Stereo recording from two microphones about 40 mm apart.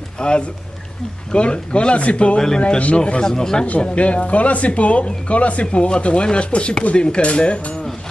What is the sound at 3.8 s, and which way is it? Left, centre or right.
Speech, left.